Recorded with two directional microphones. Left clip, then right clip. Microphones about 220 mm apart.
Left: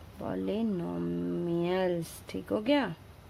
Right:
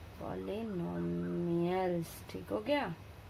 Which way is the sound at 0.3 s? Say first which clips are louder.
Left 7 dB; 40° left (ahead or behind).